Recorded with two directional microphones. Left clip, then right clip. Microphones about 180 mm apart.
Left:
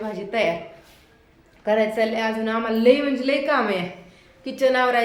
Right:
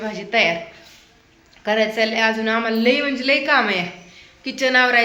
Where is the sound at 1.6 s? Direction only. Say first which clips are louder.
Right 2 dB; centre (ahead or behind).